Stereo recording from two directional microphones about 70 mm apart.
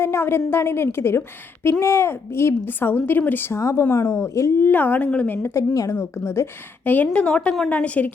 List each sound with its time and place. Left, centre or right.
0.0 s a woman's voice: left
2.6 s a woman's voice: left
3.5 s speech: left
4.6 s a woman's voice: left
5.5 s a woman's voice: left
5.9 s a woman's voice: left
6.8 s a woman's voice: left